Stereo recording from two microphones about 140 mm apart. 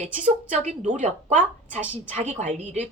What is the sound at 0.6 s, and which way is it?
Speech, 60° right (ahead or behind).